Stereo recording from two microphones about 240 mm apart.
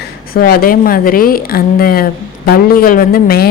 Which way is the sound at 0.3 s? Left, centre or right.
Left.